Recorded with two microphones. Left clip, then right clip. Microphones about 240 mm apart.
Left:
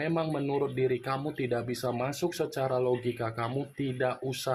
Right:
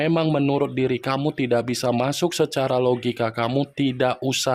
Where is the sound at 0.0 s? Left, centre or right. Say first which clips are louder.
Right 10 dB; right.